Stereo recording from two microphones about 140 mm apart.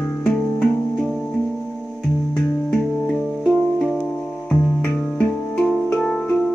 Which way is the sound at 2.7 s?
Centre (ahead or behind).